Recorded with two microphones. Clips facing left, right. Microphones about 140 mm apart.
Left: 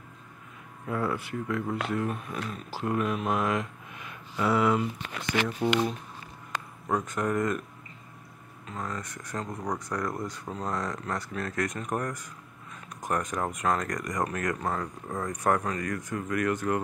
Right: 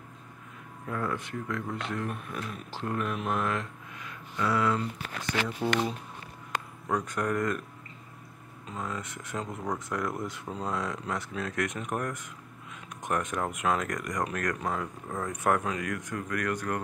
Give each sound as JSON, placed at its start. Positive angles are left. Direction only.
{"t": 0.8, "sound": "speech", "side_deg": 10}
{"t": 4.0, "sound": "speech", "side_deg": 20}
{"t": 6.9, "sound": "speech", "side_deg": 0}
{"t": 8.7, "sound": "speech", "side_deg": -5}